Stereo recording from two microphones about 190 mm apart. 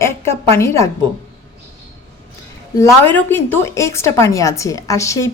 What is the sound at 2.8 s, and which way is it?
Speech, 10° left (ahead or behind).